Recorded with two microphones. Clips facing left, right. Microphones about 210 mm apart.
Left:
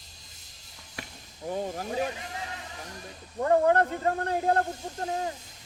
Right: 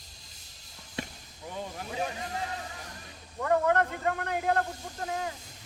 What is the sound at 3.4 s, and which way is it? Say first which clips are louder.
Speech: left 3 dB; 35° left (ahead or behind).